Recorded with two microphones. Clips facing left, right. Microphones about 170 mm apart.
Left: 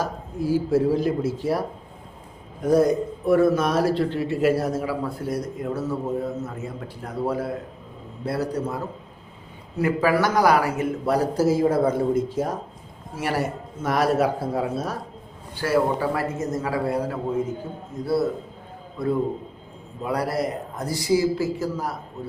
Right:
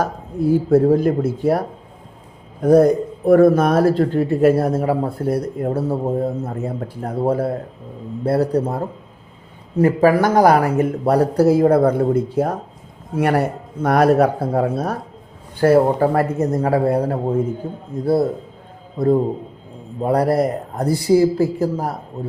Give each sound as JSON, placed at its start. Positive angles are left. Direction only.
{"t": 0.0, "sound": "a man's voice", "side_deg": -60}
{"t": 9.7, "sound": "a man's voice", "side_deg": -45}